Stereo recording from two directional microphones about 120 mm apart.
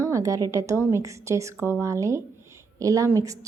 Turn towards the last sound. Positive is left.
turn(degrees=-25)  # may be behind; listen again after turning